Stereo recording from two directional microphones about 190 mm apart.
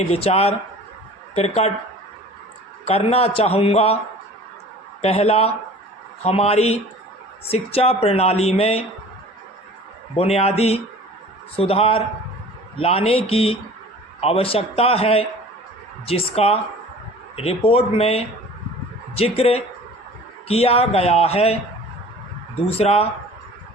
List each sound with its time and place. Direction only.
0.1 s speech: 30° left (ahead or behind)
2.8 s speech: 30° left (ahead or behind)
5.0 s speech: 35° left (ahead or behind)
10.2 s speech: 35° left (ahead or behind)
22.6 s speech: 30° left (ahead or behind)